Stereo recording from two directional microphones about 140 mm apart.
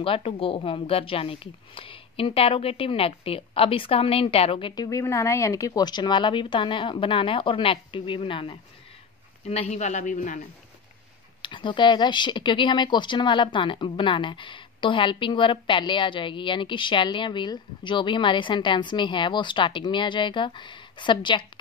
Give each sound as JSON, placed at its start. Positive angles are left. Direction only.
{"t": 0.0, "sound": "speech", "side_deg": 40}
{"t": 4.8, "sound": "speech", "side_deg": 20}
{"t": 9.5, "sound": "a man's voice", "side_deg": 50}
{"t": 11.4, "sound": "speech", "side_deg": 35}